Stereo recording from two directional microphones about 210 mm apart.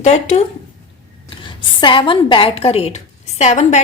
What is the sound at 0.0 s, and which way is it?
Speech, 30° left (ahead or behind).